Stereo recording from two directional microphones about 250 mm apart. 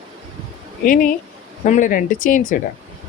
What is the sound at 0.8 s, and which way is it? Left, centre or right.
Speech, left.